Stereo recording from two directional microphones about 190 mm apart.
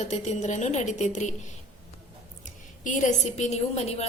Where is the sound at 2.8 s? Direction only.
40° left (ahead or behind).